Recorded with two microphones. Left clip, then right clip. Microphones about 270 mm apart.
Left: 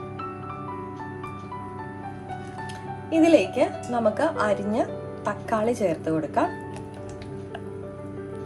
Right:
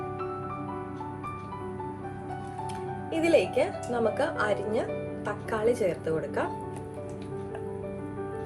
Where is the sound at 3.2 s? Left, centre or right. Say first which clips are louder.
Left 5 dB; left.